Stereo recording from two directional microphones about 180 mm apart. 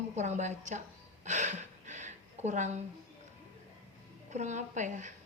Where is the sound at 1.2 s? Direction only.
40° right (ahead or behind).